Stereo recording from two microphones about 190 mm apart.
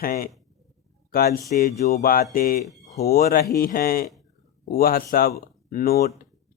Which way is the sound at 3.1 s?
55° left (ahead or behind).